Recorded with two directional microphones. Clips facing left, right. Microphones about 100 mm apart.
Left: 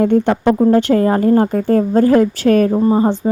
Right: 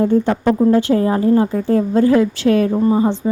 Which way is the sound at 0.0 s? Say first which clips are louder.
Left 2 dB; 65° left (ahead or behind).